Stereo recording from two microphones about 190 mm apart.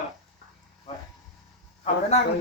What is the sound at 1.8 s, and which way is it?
Speech, 35° left (ahead or behind).